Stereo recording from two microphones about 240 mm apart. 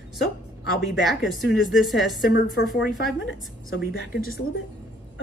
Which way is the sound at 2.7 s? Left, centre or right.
Left.